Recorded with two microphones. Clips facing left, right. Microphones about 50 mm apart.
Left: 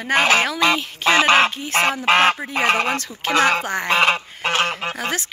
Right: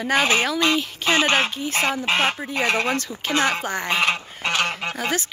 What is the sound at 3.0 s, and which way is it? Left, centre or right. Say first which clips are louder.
Speech: left 4 dB; left.